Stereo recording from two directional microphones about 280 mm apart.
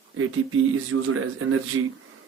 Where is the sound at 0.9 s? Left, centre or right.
Right.